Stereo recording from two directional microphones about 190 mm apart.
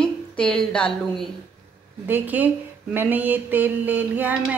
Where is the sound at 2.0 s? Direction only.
10° right (ahead or behind).